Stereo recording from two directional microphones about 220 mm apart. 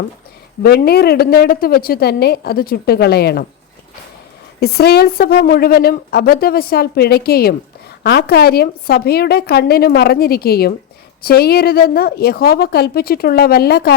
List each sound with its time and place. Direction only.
0.6 s speech: 45° left (ahead or behind)
4.6 s speech: 45° left (ahead or behind)